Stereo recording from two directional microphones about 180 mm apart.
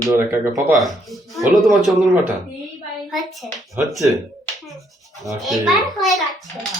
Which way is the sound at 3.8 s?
Centre (ahead or behind).